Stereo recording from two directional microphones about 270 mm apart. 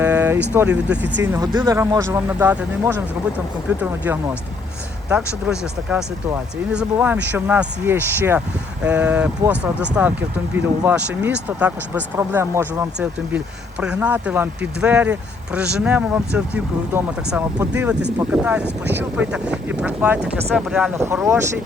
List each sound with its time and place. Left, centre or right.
0.0 s vehicle: centre
0.5 s speech: centre
17.3 s speech: centre